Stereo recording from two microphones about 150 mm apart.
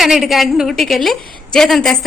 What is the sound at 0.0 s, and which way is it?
A woman's voice, centre (ahead or behind).